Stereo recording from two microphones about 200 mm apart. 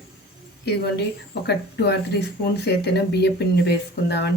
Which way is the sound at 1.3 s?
55° left (ahead or behind).